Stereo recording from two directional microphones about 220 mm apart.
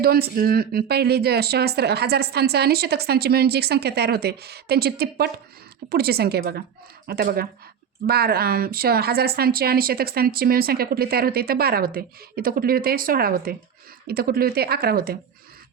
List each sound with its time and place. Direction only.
0.0 s speech: 45° right (ahead or behind)